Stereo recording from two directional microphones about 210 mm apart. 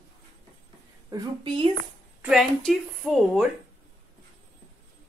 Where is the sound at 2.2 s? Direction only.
Centre (ahead or behind).